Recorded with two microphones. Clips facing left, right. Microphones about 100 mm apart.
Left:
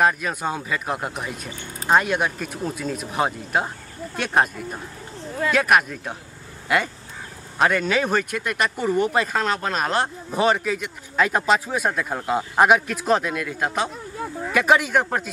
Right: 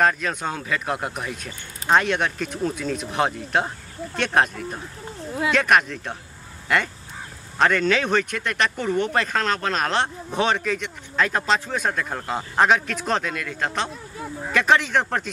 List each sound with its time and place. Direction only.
0.0 s speech: 5° left (ahead or behind)